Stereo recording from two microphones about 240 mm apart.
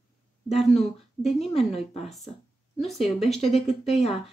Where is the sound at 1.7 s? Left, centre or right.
Left.